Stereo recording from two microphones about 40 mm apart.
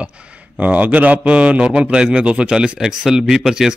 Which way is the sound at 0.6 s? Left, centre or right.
Right.